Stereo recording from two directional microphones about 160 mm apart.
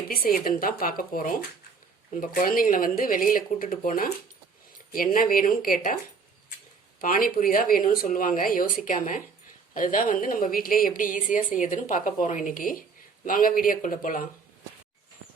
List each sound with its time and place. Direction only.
0.1 s speech: 60° left (ahead or behind)
7.0 s speech: 60° left (ahead or behind)